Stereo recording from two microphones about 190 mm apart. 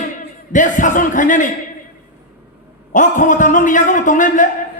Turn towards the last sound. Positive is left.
turn(degrees=45)  # may be behind; listen again after turning